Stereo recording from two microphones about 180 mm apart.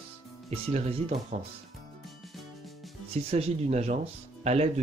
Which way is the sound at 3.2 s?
35° right (ahead or behind).